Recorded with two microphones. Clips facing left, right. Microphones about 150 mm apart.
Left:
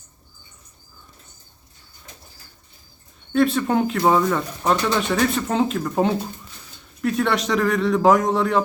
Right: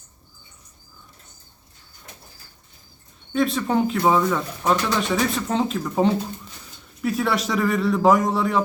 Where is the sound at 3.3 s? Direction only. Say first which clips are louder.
Left 2 dB; centre (ahead or behind).